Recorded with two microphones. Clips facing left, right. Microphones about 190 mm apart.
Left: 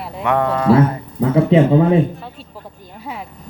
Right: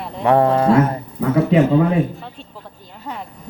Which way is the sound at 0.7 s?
30° left (ahead or behind).